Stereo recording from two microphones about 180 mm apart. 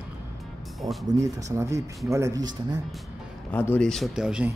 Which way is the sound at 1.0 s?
20° right (ahead or behind).